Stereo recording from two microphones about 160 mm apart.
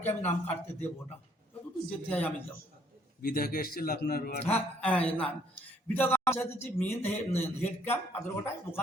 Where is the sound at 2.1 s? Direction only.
10° left (ahead or behind).